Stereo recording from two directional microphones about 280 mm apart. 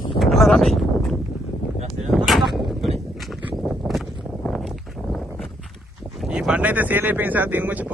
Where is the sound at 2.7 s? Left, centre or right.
Centre.